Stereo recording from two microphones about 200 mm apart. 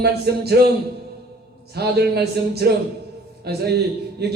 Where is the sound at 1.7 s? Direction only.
55° right (ahead or behind).